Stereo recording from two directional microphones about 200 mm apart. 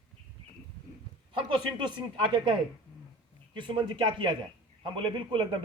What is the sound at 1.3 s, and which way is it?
Speech, 25° right (ahead or behind).